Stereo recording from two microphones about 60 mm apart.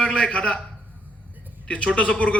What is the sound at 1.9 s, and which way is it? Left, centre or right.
Speech, centre.